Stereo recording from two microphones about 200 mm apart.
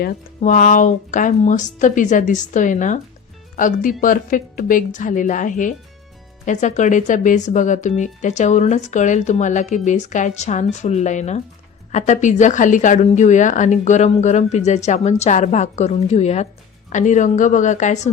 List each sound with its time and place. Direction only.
0.0 s speech: 40° left (ahead or behind)